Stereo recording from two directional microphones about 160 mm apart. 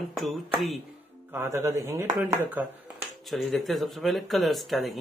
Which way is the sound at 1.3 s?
15° right (ahead or behind).